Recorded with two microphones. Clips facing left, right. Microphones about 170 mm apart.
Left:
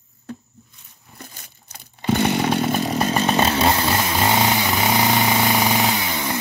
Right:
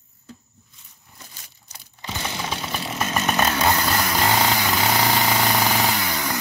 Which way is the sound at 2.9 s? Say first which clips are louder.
Left 1 dB; 35° left (ahead or behind).